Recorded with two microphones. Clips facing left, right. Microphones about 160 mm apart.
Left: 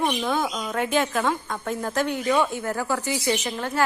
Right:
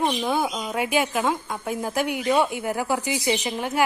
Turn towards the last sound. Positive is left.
turn(degrees=-15)  # may be behind; listen again after turning